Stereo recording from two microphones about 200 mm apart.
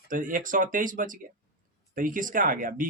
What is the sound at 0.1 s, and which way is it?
Speech, 40° right (ahead or behind).